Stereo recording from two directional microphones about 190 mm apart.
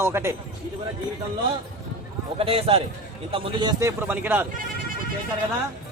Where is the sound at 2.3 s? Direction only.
30° right (ahead or behind).